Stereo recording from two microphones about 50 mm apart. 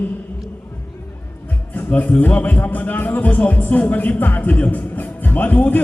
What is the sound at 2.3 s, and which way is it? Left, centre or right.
Speech, left.